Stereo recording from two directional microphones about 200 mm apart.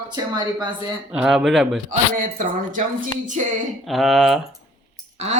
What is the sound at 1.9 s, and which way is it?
Speech, 40° right (ahead or behind).